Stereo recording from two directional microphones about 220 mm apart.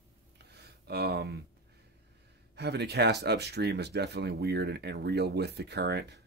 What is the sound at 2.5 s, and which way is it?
Speech, 50° right (ahead or behind).